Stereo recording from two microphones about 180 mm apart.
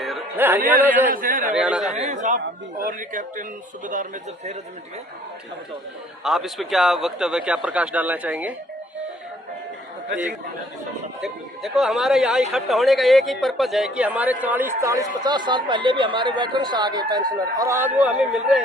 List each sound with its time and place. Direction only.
0.3 s a man's voice: 10° right (ahead or behind)
1.1 s speech: 50° right (ahead or behind)
1.5 s speech: 5° right (ahead or behind)
1.9 s speech: 40° right (ahead or behind)
6.2 s speech: centre (ahead or behind)
11.2 s speech: centre (ahead or behind)